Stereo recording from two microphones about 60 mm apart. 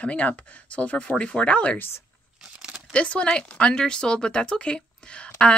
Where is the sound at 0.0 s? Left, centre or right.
Left.